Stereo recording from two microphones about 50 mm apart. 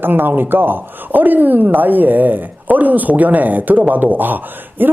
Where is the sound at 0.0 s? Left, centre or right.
Right.